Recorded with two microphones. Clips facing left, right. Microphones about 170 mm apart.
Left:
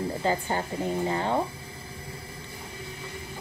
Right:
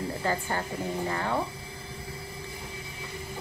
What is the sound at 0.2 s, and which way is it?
A woman's voice, 20° left (ahead or behind).